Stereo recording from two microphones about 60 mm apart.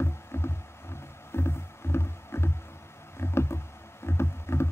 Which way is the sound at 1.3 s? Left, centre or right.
Left.